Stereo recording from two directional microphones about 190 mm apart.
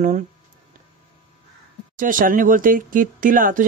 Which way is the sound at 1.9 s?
45° right (ahead or behind).